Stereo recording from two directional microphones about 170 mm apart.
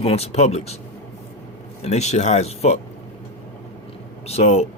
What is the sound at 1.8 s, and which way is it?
Speech, 40° left (ahead or behind).